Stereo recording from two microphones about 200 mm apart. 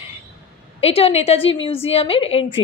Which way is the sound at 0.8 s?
30° left (ahead or behind).